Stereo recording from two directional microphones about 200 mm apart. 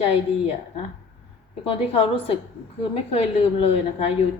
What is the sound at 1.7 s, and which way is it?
Speech, 30° left (ahead or behind).